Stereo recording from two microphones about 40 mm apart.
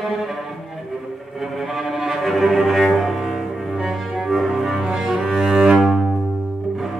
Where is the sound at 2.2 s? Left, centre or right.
Centre.